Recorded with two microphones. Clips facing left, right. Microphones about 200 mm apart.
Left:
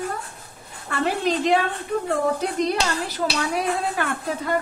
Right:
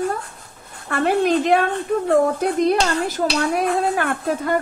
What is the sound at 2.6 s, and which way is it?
Speech, 50° right (ahead or behind).